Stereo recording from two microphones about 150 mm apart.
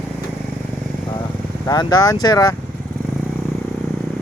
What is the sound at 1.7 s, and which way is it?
Speech, 25° left (ahead or behind).